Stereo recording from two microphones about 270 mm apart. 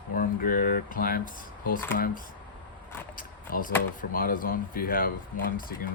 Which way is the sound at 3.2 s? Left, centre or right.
Left.